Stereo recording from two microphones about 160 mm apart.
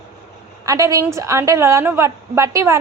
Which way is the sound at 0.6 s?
20° right (ahead or behind).